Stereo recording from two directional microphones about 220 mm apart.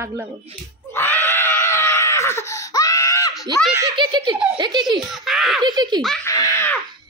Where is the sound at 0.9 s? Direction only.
10° left (ahead or behind).